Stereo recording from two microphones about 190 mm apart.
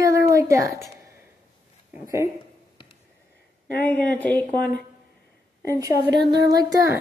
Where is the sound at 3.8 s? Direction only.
10° left (ahead or behind).